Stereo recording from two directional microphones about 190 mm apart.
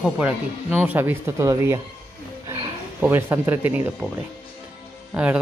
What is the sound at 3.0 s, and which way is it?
Speech, 10° right (ahead or behind).